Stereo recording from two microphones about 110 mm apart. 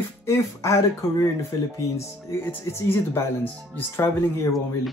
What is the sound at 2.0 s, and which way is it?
Speech, 20° left (ahead or behind).